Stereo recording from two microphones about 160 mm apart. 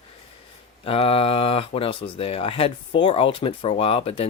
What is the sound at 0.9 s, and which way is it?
Speech, 35° left (ahead or behind).